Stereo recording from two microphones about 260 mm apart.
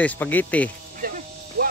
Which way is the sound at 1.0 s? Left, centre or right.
Right.